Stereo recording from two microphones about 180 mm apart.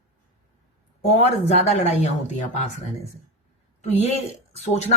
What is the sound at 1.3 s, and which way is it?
Speech, 35° left (ahead or behind).